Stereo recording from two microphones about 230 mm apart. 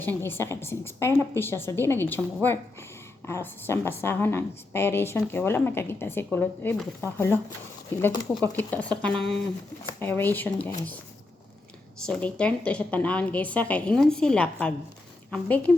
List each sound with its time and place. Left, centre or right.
0.3 s a woman's voice: centre
12.0 s a woman's voice: centre